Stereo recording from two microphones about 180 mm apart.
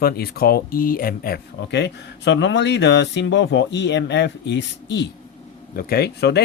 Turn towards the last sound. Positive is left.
turn(degrees=65)  # may be behind; listen again after turning